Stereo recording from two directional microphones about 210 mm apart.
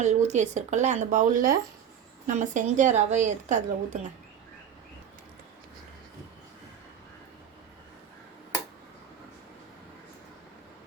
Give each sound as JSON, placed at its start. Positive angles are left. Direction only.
{"t": 0.0, "sound": "a woman's voice", "side_deg": -35}